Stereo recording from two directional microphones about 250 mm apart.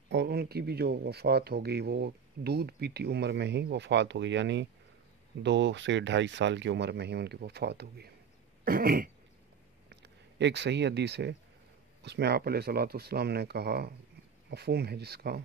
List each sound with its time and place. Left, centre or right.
0.1 s a man's voice: right